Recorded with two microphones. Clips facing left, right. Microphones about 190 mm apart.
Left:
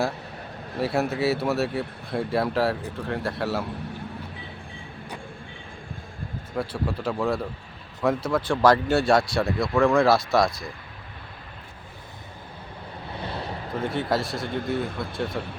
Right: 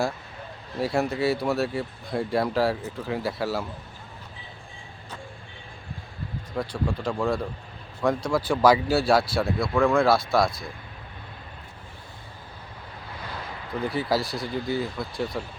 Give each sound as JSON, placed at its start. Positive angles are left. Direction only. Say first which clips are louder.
{"t": 0.8, "sound": "speech", "louder": "even", "side_deg": 0}
{"t": 6.6, "sound": "speech", "louder": "even", "side_deg": 5}
{"t": 13.1, "sound": "waves", "louder": "left 5 dB", "side_deg": 30}
{"t": 13.7, "sound": "speech", "louder": "even", "side_deg": 0}